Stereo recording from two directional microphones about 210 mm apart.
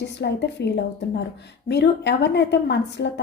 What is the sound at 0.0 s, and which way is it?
A woman's voice, 55° left (ahead or behind).